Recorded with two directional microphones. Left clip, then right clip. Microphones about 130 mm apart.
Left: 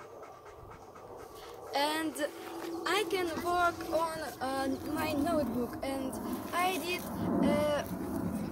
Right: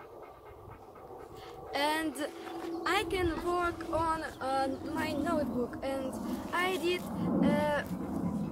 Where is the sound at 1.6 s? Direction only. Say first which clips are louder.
Even; 15° right (ahead or behind).